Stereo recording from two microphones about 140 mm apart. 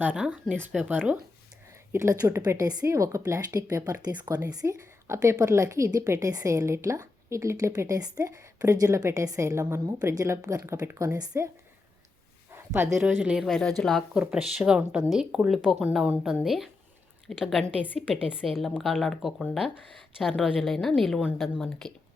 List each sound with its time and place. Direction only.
0.0 s a woman's voice: 10° right (ahead or behind)
12.7 s speech: 15° right (ahead or behind); by 21.9 s centre (ahead or behind)